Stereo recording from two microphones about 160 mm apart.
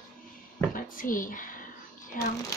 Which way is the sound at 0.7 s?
55° left (ahead or behind).